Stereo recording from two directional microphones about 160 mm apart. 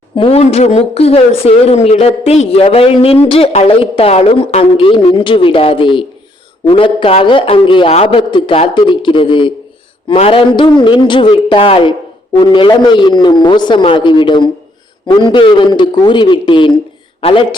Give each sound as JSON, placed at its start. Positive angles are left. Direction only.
{"t": 0.2, "sound": "a woman's voice", "side_deg": 40}